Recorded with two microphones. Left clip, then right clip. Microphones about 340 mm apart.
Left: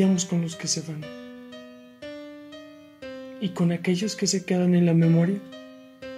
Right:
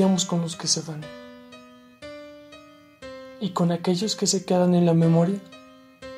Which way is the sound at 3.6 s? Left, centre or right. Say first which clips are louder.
Right 3 dB; right.